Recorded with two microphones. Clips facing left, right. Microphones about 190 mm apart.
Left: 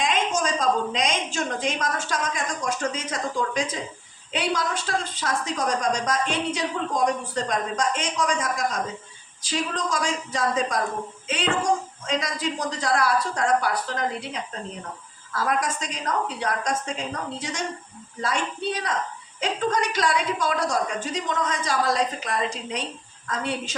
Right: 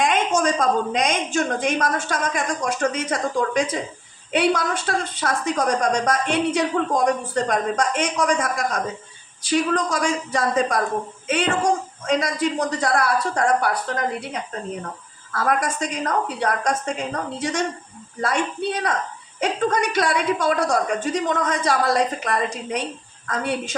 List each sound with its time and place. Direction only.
0.3 s a woman's voice: 55° right (ahead or behind)